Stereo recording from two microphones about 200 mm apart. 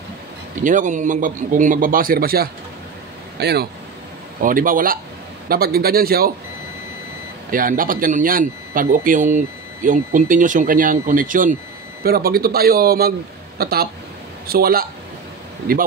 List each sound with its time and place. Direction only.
0.7 s a man's voice: 40° right (ahead or behind); by 3.6 s 55° right (ahead or behind)
4.4 s a man's voice: 45° right (ahead or behind)
7.5 s a man's voice: 45° right (ahead or behind)